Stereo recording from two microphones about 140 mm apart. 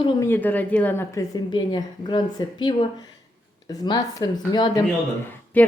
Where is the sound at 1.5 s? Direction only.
30° left (ahead or behind).